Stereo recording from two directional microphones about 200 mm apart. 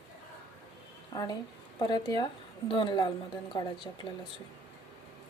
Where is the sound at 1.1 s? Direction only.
20° left (ahead or behind).